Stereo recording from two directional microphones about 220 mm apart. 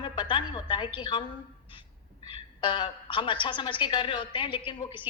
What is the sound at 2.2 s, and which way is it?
A woman's voice, 20° left (ahead or behind).